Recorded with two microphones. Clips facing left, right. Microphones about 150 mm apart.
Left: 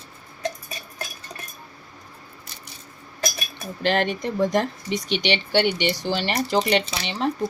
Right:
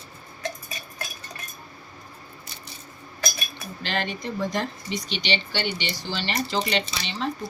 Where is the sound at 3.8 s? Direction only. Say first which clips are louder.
Left 7 dB; 55° left (ahead or behind).